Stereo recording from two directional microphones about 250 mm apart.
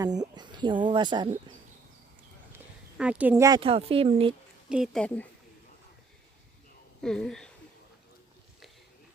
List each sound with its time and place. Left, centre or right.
0.0 s speech: centre
3.0 s speech: centre; by 4.4 s right
4.7 s speech: centre
7.0 s speech: centre